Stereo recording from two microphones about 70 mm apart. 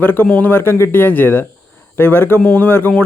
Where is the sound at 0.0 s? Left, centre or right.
Left.